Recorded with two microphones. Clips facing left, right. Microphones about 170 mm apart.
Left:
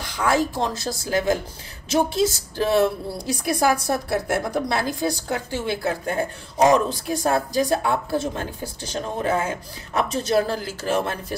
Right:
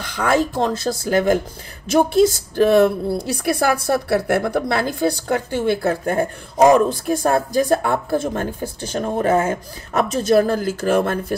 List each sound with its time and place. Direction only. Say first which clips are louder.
0.0 s a woman's voice: right 3 dB; 60° right (ahead or behind)